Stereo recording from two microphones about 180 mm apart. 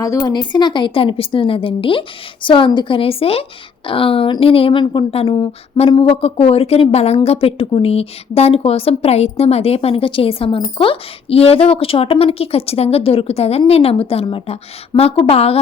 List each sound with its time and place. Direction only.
0.0 s a woman's voice: 20° left (ahead or behind)